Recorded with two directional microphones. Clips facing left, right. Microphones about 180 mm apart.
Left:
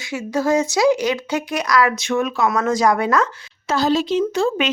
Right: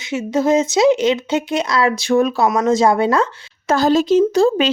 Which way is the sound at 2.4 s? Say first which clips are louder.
Right 3 dB; 20° right (ahead or behind).